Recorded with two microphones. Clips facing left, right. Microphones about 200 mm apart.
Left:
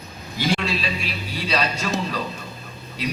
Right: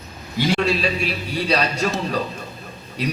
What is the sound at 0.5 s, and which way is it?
A man's voice, 40° right (ahead or behind).